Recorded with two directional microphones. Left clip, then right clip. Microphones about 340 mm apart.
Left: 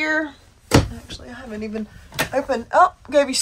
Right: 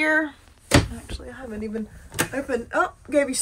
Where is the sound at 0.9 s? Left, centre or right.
Centre.